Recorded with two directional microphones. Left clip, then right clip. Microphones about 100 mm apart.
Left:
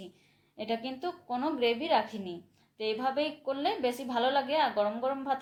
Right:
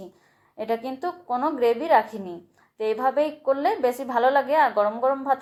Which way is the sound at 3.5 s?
20° left (ahead or behind).